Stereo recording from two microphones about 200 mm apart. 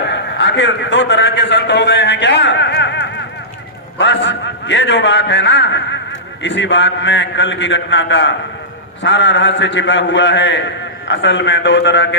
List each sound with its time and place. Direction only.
0.1 s a man's voice: 65° left (ahead or behind)